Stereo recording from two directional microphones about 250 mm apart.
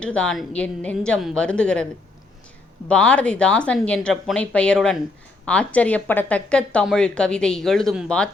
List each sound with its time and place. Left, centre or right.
0.0 s speech: centre
2.9 s speech: centre